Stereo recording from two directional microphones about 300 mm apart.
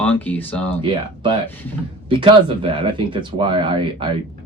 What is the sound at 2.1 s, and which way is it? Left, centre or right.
Speech, centre.